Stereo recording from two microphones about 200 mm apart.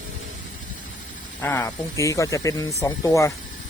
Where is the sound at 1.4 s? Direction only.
10° left (ahead or behind).